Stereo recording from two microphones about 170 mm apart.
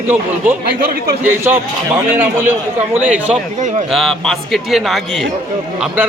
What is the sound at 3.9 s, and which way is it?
A man's voice, centre (ahead or behind).